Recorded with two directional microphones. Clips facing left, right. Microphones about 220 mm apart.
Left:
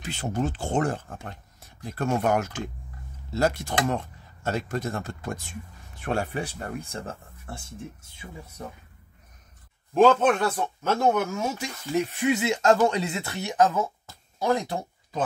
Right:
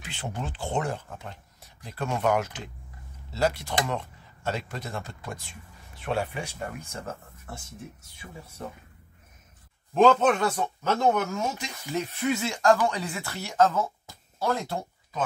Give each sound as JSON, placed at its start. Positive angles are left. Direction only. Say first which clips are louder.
{"t": 0.0, "sound": "speech", "louder": "left 7 dB", "side_deg": 40}
{"t": 6.3, "sound": "speech", "louder": "left 3 dB", "side_deg": 35}
{"t": 9.9, "sound": "speech", "louder": "left 1 dB", "side_deg": 5}